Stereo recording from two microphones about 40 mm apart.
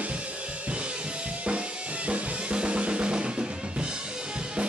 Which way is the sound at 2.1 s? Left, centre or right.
Right.